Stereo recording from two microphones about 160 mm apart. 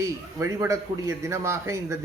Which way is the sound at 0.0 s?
20° right (ahead or behind).